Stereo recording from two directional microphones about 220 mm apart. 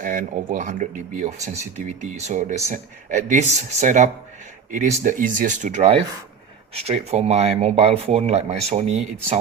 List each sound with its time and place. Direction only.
0.0 s speech: 35° right (ahead or behind)